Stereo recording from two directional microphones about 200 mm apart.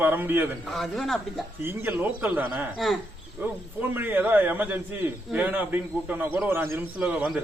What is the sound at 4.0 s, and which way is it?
Speech, 10° right (ahead or behind).